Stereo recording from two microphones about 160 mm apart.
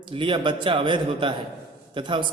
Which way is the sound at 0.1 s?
30° right (ahead or behind).